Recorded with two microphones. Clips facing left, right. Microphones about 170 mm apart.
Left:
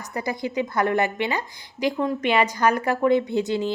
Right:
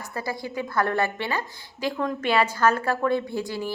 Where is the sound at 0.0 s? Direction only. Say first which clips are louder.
Left 3 dB; 20° left (ahead or behind).